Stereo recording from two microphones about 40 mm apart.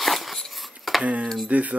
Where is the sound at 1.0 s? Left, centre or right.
Right.